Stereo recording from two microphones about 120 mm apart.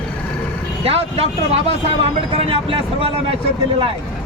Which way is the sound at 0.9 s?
55° right (ahead or behind).